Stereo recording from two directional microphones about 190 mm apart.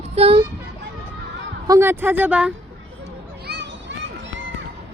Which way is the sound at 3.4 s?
65° right (ahead or behind).